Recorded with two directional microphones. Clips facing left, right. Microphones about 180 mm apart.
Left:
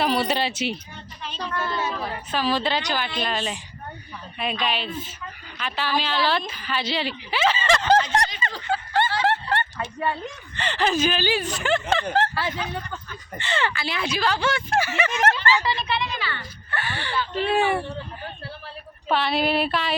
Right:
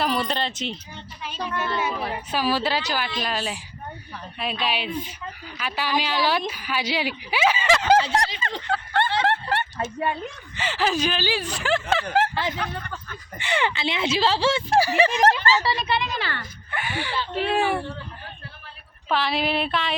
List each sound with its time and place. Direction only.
0.0 s speech: centre (ahead or behind)
1.2 s a woman's voice: 10° right (ahead or behind)
8.6 s a sound: 5° left (ahead or behind)
9.2 s snicker: centre (ahead or behind)
10.5 s speech: 5° right (ahead or behind)
13.4 s speech: 15° right (ahead or behind); by 16.5 s 40° right (ahead or behind)
16.7 s a woman's voice: 10° right (ahead or behind)
19.0 s speech: centre (ahead or behind)